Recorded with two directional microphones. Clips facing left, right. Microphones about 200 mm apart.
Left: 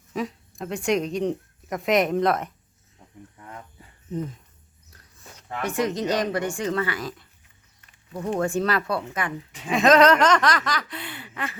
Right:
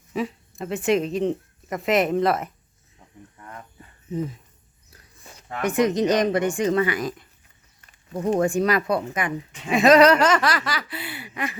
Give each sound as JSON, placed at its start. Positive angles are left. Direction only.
{"t": 0.1, "sound": "speech", "side_deg": 0}
{"t": 4.1, "sound": "speech", "side_deg": -5}
{"t": 4.9, "sound": "a sound", "side_deg": -5}
{"t": 5.6, "sound": "speech", "side_deg": -20}
{"t": 8.4, "sound": "speech", "side_deg": -15}